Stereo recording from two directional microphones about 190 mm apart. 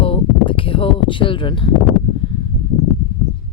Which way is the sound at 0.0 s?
30° left (ahead or behind).